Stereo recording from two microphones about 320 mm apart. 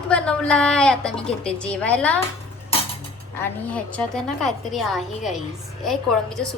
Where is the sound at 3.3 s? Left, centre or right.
Centre.